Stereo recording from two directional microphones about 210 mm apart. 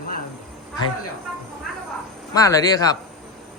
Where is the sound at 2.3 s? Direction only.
15° left (ahead or behind).